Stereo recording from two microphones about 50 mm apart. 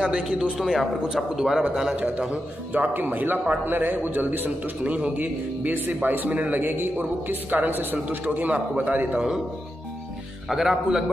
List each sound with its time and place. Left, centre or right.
0.0 s a man's voice: centre
0.6 s a man's voice: centre
2.7 s a man's voice: right
4.8 s a man's voice: right
10.5 s a man's voice: centre